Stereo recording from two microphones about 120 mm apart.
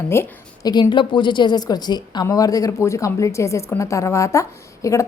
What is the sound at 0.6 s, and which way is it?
A woman's voice, 35° left (ahead or behind).